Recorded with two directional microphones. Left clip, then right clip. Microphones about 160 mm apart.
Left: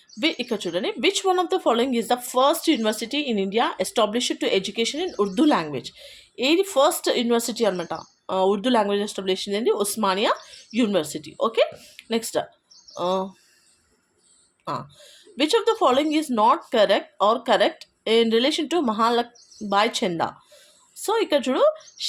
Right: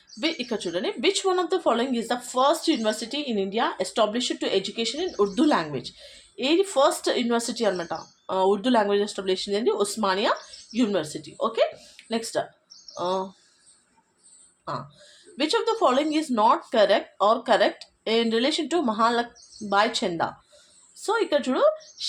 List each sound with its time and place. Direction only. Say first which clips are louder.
0.2 s speech: left 3 dB; 35° left (ahead or behind)
14.6 s speech: left 3 dB; 40° left (ahead or behind)